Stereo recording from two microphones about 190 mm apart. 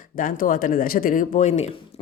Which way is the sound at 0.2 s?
45° left (ahead or behind).